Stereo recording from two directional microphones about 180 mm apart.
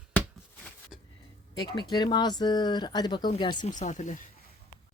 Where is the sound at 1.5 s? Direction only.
25° left (ahead or behind).